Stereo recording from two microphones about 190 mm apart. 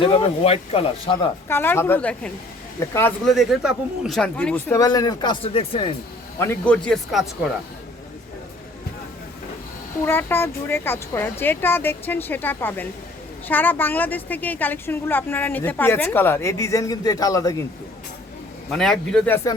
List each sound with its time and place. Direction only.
0.0 s speech: 30° left (ahead or behind)
1.5 s a woman's voice: 10° left (ahead or behind)
3.2 s a woman's voice: centre (ahead or behind); by 5.9 s 30° left (ahead or behind)
6.4 s speech: 10° left (ahead or behind)
10.0 s a woman's voice: 10° left (ahead or behind)
18.7 s speech: 5° left (ahead or behind)